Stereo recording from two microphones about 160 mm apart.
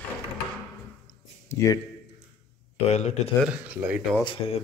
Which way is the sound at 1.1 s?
15° left (ahead or behind).